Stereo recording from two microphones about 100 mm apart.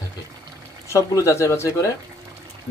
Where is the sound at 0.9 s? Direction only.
30° left (ahead or behind).